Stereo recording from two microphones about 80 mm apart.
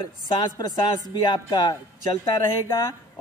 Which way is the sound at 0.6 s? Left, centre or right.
Left.